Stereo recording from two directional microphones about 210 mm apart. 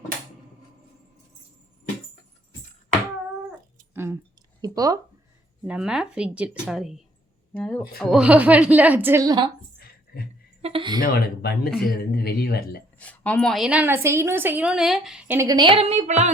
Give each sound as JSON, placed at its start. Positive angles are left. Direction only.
{"t": 3.9, "sound": "a sound", "side_deg": -10}
{"t": 4.6, "sound": "a woman's voice", "side_deg": -15}
{"t": 5.6, "sound": "a woman's voice", "side_deg": -5}
{"t": 10.6, "sound": "speech", "side_deg": -25}
{"t": 11.0, "sound": "speech", "side_deg": 45}
{"t": 11.7, "sound": "speech", "side_deg": 0}
{"t": 12.1, "sound": "speech", "side_deg": 50}
{"t": 13.0, "sound": "a woman's voice", "side_deg": 5}